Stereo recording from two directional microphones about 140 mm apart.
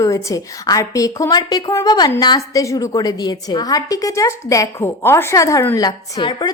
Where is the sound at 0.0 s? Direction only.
25° left (ahead or behind).